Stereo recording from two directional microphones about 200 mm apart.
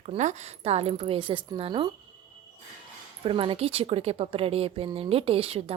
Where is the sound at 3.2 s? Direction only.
25° right (ahead or behind).